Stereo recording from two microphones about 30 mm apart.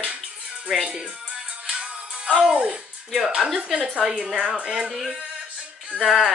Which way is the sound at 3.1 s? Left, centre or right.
Centre.